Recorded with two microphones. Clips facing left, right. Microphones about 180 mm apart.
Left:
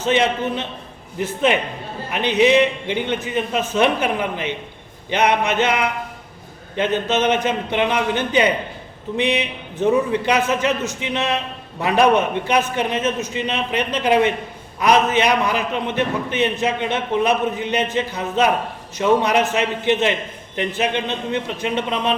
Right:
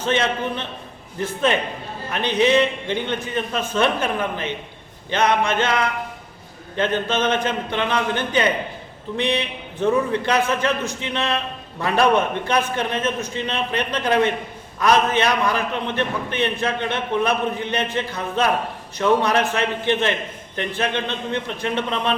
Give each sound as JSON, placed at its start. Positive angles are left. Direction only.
{"t": 0.1, "sound": "a man's voice", "side_deg": 15}
{"t": 2.1, "sound": "a man's voice", "side_deg": 15}
{"t": 7.4, "sound": "a man's voice", "side_deg": 15}